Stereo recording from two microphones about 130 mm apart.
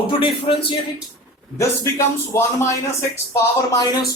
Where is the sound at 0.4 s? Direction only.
40° left (ahead or behind).